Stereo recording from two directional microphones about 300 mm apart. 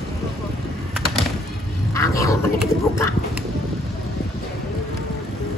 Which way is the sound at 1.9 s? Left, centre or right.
Centre.